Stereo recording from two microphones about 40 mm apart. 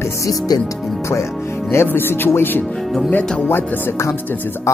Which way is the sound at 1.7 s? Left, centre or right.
Left.